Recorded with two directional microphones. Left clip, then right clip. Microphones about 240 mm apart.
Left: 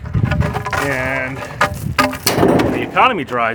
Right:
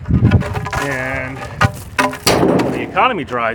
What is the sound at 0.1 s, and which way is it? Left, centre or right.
Vehicle, centre.